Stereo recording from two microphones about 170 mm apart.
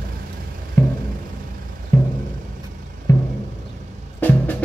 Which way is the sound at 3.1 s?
20° left (ahead or behind).